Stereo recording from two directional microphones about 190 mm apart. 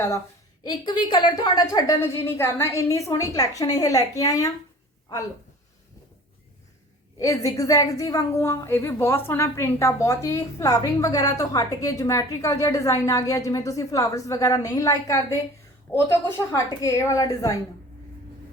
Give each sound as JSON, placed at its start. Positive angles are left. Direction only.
{"t": 0.7, "sound": "a woman's voice", "side_deg": 25}
{"t": 7.2, "sound": "a woman's voice", "side_deg": 15}